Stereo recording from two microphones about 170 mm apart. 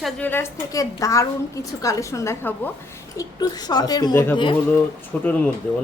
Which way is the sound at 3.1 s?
25° left (ahead or behind).